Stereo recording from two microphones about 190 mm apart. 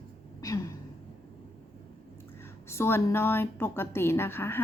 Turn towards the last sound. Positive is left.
turn(degrees=10)  # may be behind; listen again after turning